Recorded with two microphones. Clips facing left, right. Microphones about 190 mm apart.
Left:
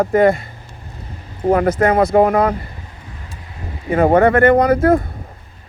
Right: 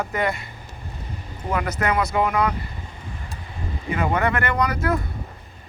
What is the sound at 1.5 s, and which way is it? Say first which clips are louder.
Speech: left 10 dB; 50° left (ahead or behind).